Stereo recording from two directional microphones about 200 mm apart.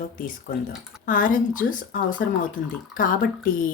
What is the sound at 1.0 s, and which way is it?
A woman's voice, 40° left (ahead or behind).